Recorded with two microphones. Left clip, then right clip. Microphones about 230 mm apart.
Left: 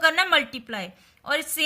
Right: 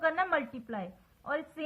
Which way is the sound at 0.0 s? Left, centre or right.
Left.